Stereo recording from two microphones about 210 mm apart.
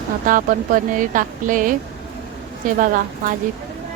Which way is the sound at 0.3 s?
40° right (ahead or behind).